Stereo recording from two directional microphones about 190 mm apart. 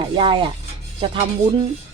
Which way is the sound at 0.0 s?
25° right (ahead or behind).